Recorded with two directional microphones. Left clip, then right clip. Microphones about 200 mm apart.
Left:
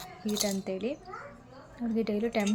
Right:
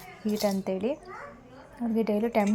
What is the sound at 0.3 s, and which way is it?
Speech, 5° right (ahead or behind).